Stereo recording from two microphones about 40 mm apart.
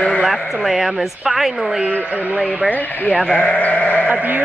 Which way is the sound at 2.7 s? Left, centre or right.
Left.